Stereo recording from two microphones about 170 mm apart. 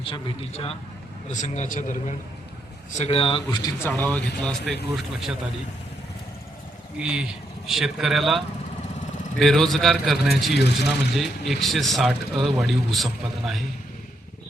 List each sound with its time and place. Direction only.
0.0 s a man's voice: 30° left (ahead or behind); by 2.1 s 50° left (ahead or behind)
2.9 s speech: 40° left (ahead or behind); by 5.4 s centre (ahead or behind)
7.0 s speech: 5° right (ahead or behind)